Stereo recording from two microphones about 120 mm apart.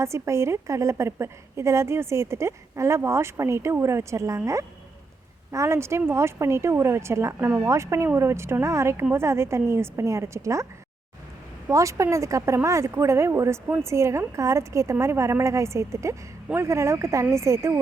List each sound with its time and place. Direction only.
0.0 s a woman's voice: 25° right (ahead or behind)
11.7 s a woman's voice: 25° right (ahead or behind)